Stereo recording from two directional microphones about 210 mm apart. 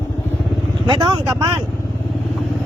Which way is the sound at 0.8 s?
20° right (ahead or behind).